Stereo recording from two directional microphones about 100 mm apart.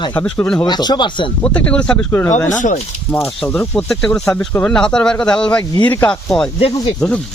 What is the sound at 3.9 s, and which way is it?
Speech, 5° left (ahead or behind).